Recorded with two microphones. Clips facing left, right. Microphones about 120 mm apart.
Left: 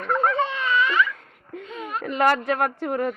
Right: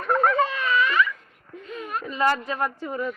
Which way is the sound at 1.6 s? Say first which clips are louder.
Even; 20° left (ahead or behind).